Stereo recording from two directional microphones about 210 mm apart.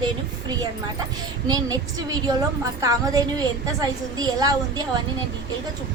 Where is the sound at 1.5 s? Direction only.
15° right (ahead or behind).